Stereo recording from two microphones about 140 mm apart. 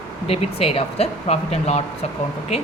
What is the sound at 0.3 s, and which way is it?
Speech, 40° left (ahead or behind).